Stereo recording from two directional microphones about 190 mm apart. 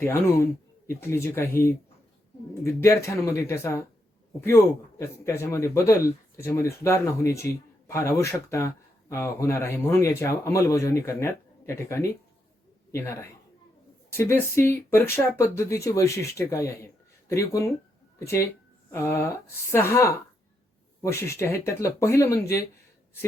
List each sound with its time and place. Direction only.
0.0 s a man's voice: 15° left (ahead or behind)
2.8 s a man's voice: 15° left (ahead or behind)